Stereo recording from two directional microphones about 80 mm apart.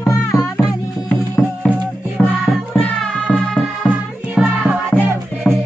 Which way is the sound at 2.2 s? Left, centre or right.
Centre.